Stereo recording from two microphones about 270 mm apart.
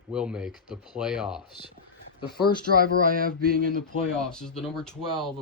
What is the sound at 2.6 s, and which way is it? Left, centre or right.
Speech, right.